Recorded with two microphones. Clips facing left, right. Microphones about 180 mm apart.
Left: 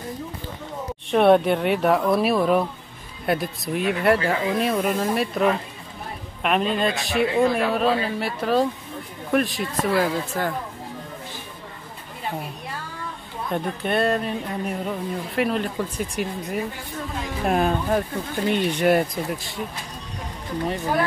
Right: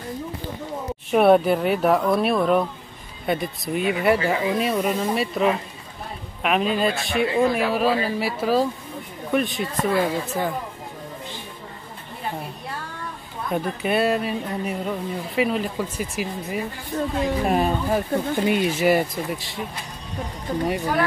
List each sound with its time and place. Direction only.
1.1 s speech: 5° right (ahead or behind)
13.5 s speech: 5° right (ahead or behind)
20.5 s speech: 40° right (ahead or behind)